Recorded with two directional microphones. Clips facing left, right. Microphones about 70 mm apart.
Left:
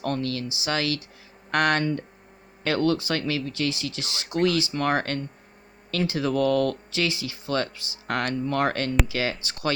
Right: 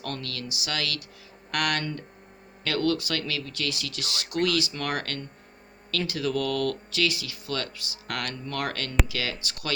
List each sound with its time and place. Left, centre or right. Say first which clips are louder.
0.0 s speech: left 7 dB; left
1.8 s speech: left 7 dB; centre